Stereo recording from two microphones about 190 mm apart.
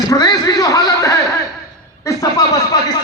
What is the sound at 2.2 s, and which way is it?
Speech, 20° left (ahead or behind).